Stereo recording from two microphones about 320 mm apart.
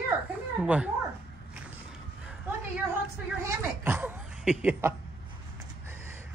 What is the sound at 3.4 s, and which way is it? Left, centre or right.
Speech, centre.